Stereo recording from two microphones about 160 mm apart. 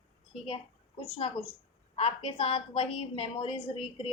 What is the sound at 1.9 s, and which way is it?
A woman's voice, 35° left (ahead or behind).